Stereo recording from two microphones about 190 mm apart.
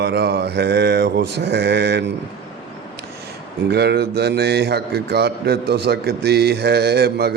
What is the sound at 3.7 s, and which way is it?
A man's voice, 60° right (ahead or behind).